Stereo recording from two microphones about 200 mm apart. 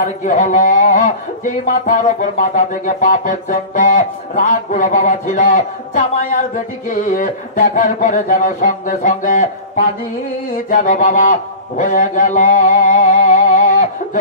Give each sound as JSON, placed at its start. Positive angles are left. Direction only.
{"t": 0.0, "sound": "a man's voice", "side_deg": 40}
{"t": 10.5, "sound": "a man's voice", "side_deg": 40}